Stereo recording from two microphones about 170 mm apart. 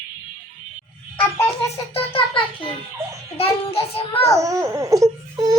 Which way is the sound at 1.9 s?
30° left (ahead or behind).